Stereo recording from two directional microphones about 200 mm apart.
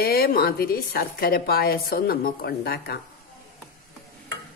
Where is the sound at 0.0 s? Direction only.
50° left (ahead or behind).